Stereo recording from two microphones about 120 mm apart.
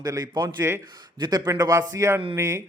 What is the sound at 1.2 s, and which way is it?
A man's voice, 35° right (ahead or behind).